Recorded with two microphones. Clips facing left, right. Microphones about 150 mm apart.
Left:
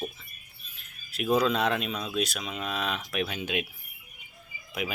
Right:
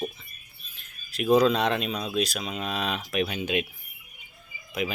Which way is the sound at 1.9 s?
30° right (ahead or behind).